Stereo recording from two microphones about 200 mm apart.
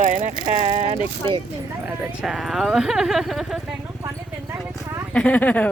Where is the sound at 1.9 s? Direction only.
5° right (ahead or behind).